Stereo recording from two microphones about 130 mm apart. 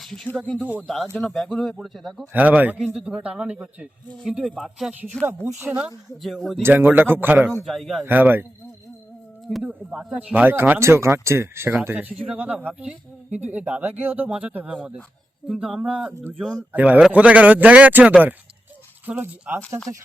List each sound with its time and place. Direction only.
0.0 s speech: 5° left (ahead or behind)
0.6 s speech: 10° right (ahead or behind)
1.1 s speech: centre (ahead or behind)
2.3 s speech: 10° right (ahead or behind); by 5.3 s 10° left (ahead or behind)
5.5 s speech: 15° right (ahead or behind)
6.2 s speech: centre (ahead or behind)
6.6 s speech: 15° right (ahead or behind)
7.6 s speech: centre (ahead or behind)
8.0 s speech: 15° right (ahead or behind)
9.6 s speech: 5° right (ahead or behind)